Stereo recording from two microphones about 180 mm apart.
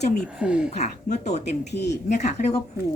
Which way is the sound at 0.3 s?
5° right (ahead or behind).